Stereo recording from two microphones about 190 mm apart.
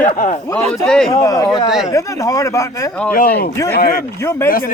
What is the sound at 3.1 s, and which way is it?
Speech, 50° left (ahead or behind).